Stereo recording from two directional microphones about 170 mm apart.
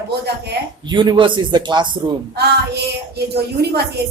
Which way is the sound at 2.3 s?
75° right (ahead or behind).